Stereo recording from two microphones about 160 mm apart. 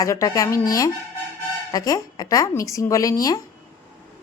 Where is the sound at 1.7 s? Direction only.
20° left (ahead or behind).